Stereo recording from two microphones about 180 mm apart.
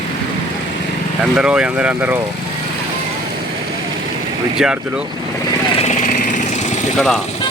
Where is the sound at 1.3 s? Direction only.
5° right (ahead or behind).